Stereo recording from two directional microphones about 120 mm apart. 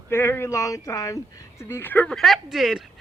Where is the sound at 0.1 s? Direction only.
20° left (ahead or behind).